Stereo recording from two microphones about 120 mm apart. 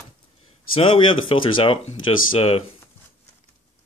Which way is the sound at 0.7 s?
50° left (ahead or behind).